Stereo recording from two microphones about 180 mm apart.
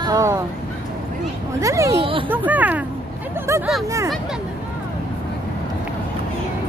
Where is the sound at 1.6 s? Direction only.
15° right (ahead or behind).